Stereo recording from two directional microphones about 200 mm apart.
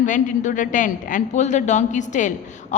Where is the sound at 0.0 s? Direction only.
40° left (ahead or behind).